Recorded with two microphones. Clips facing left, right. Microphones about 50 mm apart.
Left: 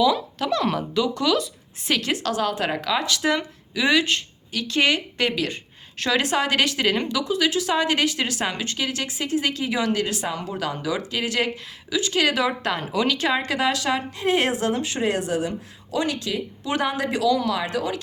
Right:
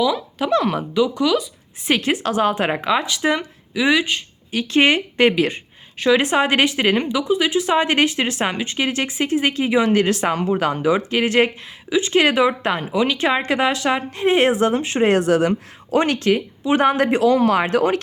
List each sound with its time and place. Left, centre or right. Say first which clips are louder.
0.3 s speech: right 4 dB; centre
1.9 s speech: right 4 dB; right
4.5 s speech: right 5 dB; right
8.8 s speech: right 8 dB; right
10.5 s speech: right 9 dB; right
15.0 s a woman's voice: right 9 dB; right
16.6 s speech: right 9 dB; right